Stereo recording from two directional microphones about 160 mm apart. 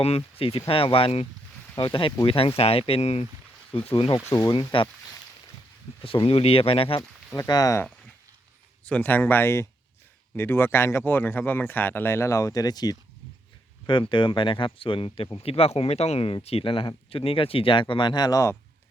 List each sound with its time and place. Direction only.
0.0 s speech: 40° left (ahead or behind)
4.3 s speech: 20° left (ahead or behind)
4.5 s speech: 30° left (ahead or behind)
6.0 s speech: 35° left (ahead or behind)
7.3 s speech: 25° left (ahead or behind)
8.8 s speech: 10° left (ahead or behind)